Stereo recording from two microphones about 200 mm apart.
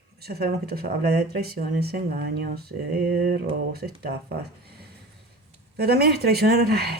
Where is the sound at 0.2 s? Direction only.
50° right (ahead or behind).